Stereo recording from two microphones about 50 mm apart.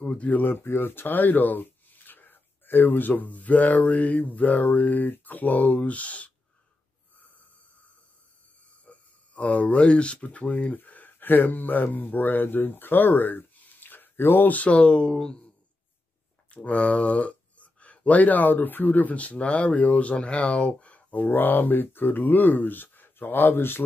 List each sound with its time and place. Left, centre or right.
0.0 s speech: left
0.3 s speech: left
0.6 s speech: left
8.8 s speech: left
14.5 s speech: left
16.4 s speech: left
21.3 s speech: left